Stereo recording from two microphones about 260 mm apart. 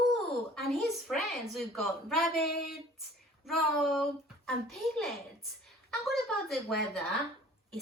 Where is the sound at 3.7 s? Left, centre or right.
Centre.